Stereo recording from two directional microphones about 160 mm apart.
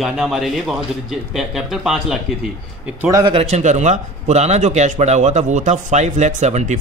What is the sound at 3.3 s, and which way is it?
A man's voice, 45° right (ahead or behind).